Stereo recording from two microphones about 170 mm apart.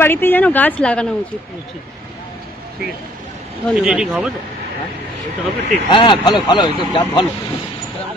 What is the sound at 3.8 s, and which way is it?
Speech, 5° right (ahead or behind).